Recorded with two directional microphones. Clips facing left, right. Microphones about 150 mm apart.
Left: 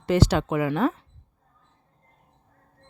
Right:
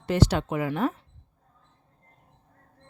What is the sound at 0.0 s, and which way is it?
Speech, 90° left.